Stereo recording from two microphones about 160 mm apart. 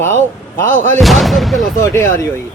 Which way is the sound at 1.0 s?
Centre (ahead or behind).